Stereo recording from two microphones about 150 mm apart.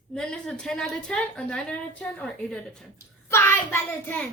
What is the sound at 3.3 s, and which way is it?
Speech, 15° left (ahead or behind).